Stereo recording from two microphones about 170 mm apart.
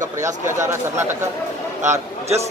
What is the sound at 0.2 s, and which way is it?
Speech, 15° right (ahead or behind).